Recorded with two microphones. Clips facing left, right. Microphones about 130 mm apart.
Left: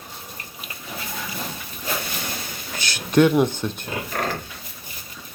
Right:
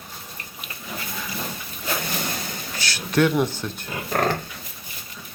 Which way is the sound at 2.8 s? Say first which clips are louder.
Left 4 dB; 20° left (ahead or behind).